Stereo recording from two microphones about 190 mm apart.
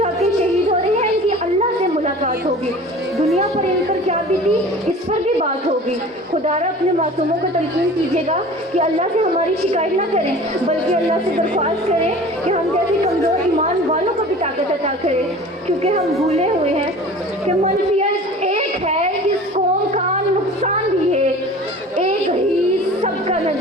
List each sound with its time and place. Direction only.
4.0 s speech: 35° right (ahead or behind)
6.4 s speech: 35° right (ahead or behind)
9.7 s speech: 35° right (ahead or behind)
14.4 s speech: 35° right (ahead or behind)
18.4 s a sound: 35° right (ahead or behind)
23.0 s music: 35° right (ahead or behind)